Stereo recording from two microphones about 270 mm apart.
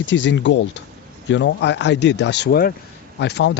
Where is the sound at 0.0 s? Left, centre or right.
Left.